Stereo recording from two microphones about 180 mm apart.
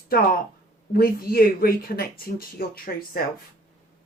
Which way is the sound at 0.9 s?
55° left (ahead or behind).